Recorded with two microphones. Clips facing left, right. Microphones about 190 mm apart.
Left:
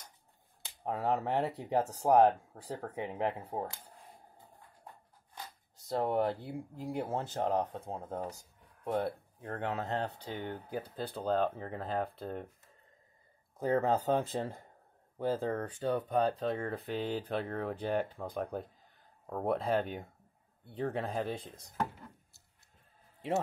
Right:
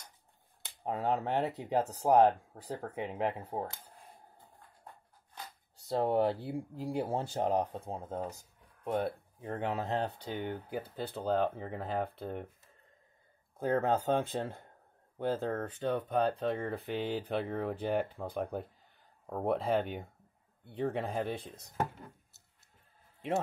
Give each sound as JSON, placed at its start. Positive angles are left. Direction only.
{"t": 0.9, "sound": "speech", "side_deg": 0}
{"t": 1.6, "sound": "speech", "side_deg": -15}
{"t": 5.9, "sound": "speech", "side_deg": -25}
{"t": 7.2, "sound": "speech", "side_deg": -10}
{"t": 8.9, "sound": "speech", "side_deg": -10}
{"t": 13.6, "sound": "speech", "side_deg": 0}